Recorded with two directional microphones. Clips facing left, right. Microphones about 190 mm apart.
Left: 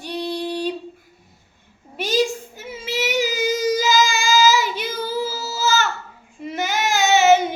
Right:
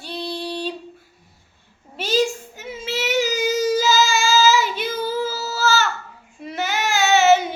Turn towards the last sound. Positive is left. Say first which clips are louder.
# left 1 dB
turn(degrees=15)  # may be behind; listen again after turning